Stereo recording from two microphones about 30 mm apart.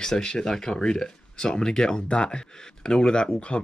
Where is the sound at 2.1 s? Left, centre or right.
Left.